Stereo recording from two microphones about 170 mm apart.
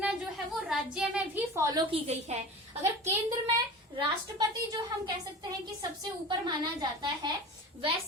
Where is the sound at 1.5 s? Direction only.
20° right (ahead or behind).